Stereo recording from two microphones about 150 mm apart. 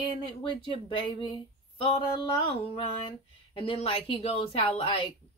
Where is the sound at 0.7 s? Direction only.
35° left (ahead or behind).